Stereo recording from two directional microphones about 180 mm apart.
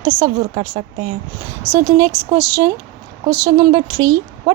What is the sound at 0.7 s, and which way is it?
Speech, 40° right (ahead or behind).